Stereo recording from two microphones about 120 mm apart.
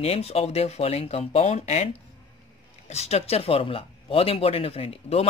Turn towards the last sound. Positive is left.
turn(degrees=55)  # may be behind; listen again after turning